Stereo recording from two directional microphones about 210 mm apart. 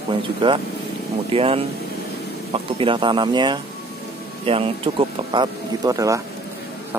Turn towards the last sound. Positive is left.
turn(degrees=-15)  # may be behind; listen again after turning